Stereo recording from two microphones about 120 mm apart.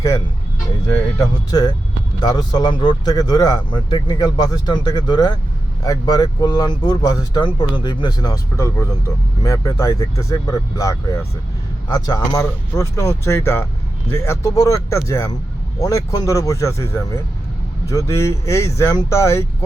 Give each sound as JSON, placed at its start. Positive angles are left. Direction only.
{"t": 0.9, "sound": "a man's voice", "side_deg": 30}
{"t": 8.5, "sound": "speech", "side_deg": 20}